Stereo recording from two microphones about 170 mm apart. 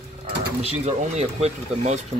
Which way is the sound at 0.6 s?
35° right (ahead or behind).